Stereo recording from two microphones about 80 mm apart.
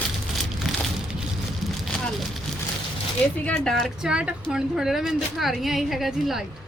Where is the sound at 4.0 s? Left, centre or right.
Centre.